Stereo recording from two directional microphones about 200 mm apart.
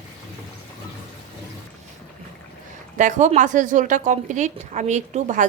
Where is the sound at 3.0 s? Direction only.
35° right (ahead or behind).